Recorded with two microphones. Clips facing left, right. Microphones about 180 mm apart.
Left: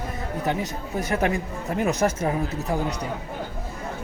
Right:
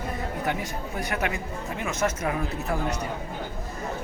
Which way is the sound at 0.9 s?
30° left (ahead or behind).